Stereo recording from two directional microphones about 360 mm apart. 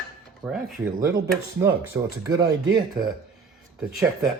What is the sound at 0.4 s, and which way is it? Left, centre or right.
Speech, centre.